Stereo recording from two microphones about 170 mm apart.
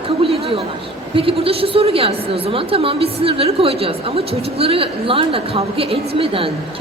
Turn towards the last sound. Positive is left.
turn(degrees=-35)  # may be behind; listen again after turning